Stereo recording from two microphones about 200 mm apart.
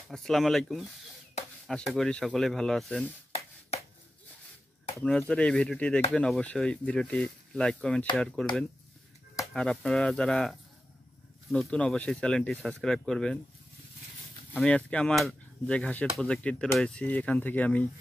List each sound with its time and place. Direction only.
0.1 s speech: centre (ahead or behind)
4.9 s speech: 5° left (ahead or behind)
14.5 s speech: 5° left (ahead or behind)